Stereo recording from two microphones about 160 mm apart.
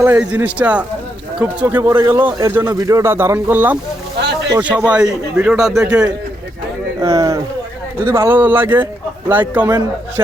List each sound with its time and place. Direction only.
0.0 s speech: 10° right (ahead or behind)
4.2 s a sound: 90° right
4.5 s speech: 10° right (ahead or behind)
7.0 s speech: 20° right (ahead or behind)